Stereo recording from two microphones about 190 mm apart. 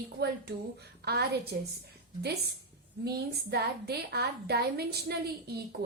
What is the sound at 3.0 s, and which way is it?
A woman's voice, 55° right (ahead or behind).